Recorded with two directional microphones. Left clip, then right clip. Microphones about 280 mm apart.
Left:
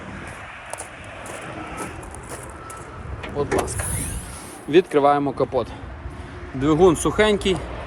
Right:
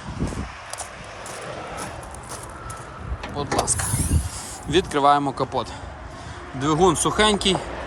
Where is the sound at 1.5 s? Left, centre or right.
Right.